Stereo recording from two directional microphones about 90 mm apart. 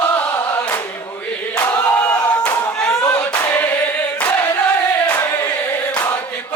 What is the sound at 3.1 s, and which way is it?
Choir, 20° left (ahead or behind).